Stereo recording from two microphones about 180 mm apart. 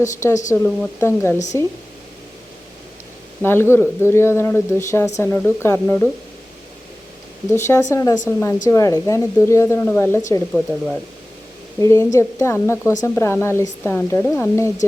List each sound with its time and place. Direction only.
0.0 s speech: 15° left (ahead or behind)
3.4 s speech: 15° left (ahead or behind)
7.6 s speech: 15° left (ahead or behind)
10.5 s speech: centre (ahead or behind)
11.8 s speech: 15° left (ahead or behind)